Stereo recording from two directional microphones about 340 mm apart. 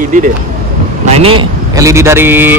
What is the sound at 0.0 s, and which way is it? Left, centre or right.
Speech, right.